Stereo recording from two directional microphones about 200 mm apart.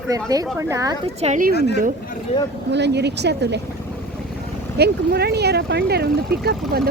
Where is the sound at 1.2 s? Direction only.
40° right (ahead or behind).